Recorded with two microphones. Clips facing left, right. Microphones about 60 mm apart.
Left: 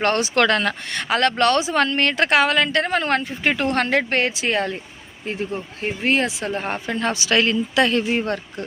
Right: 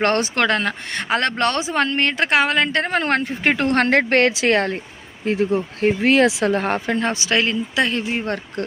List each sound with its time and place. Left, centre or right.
0.0 s speech: right
0.3 s speech: right
6.7 s speech: right
7.0 s speech: right; by 8.3 s centre
8.6 s speech: right